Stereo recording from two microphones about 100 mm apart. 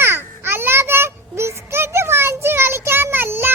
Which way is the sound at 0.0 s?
25° right (ahead or behind).